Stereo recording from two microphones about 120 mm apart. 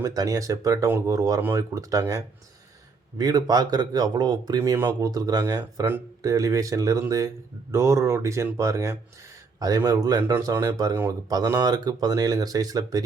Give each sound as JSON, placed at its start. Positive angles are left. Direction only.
{"t": 0.0, "sound": "speech", "side_deg": -30}